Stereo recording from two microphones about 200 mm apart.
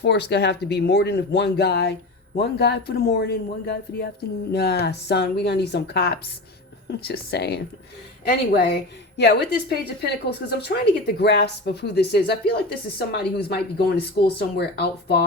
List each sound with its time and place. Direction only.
0.0 s a woman's voice: 55° left (ahead or behind)